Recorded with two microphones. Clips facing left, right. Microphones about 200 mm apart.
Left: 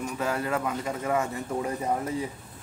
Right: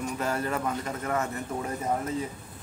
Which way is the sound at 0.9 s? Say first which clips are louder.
Left 3 dB; 10° left (ahead or behind).